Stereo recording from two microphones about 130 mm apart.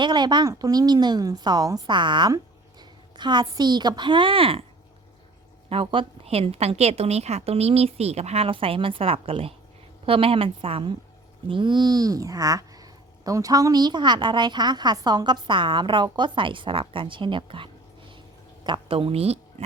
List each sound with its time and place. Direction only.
0.0 s a child's voice: 35° right (ahead or behind)
5.6 s a woman's voice: 45° right (ahead or behind)